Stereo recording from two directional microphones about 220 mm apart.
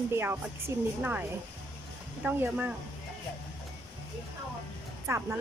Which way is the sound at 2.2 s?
5° right (ahead or behind).